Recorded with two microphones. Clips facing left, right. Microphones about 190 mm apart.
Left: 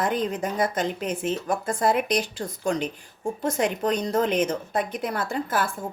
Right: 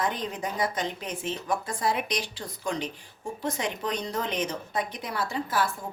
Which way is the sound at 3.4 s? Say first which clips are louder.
Left 6 dB; 50° left (ahead or behind).